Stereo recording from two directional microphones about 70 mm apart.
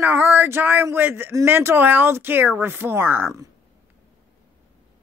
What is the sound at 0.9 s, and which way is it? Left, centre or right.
Speech, right.